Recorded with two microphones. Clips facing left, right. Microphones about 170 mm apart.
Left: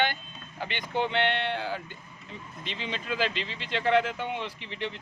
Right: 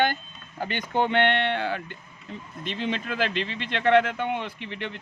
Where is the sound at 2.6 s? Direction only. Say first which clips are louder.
Right 7 dB; 50° right (ahead or behind).